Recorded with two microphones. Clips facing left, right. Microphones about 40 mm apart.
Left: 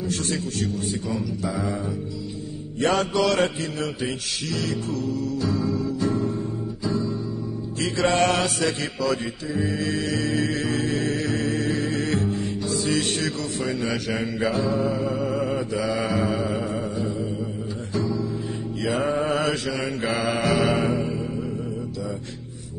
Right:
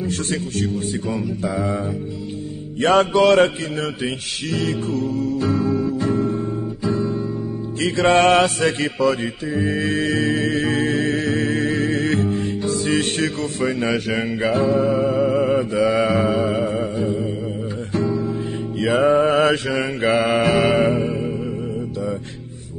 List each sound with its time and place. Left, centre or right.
0.0 s speech: right
2.8 s mantra: right
16.5 s music: right
18.8 s speech: right